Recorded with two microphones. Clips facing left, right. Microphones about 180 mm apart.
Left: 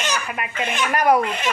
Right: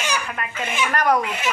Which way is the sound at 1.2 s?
5° right (ahead or behind).